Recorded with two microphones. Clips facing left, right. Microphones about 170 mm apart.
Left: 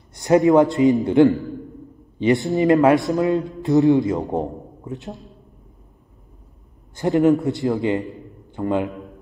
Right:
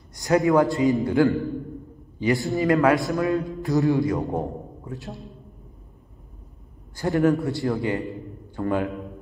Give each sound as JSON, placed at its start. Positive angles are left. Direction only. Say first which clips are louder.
{"t": 0.2, "sound": "a man's voice", "louder": "left 5 dB", "side_deg": 20}
{"t": 7.0, "sound": "speech", "louder": "left 4 dB", "side_deg": 20}